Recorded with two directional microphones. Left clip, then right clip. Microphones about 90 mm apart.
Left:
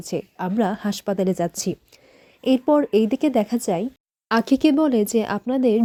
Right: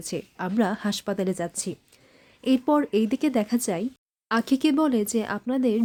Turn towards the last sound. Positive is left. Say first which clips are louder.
# left 5 dB
turn(degrees=50)  # may be behind; listen again after turning